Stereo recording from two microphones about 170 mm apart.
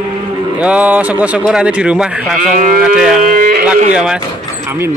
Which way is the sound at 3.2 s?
55° right (ahead or behind).